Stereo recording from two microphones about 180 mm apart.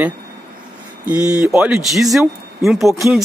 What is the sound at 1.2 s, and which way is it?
Speech, 15° right (ahead or behind).